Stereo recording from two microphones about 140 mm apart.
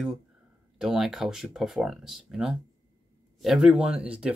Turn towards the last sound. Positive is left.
turn(degrees=-5)  # may be behind; listen again after turning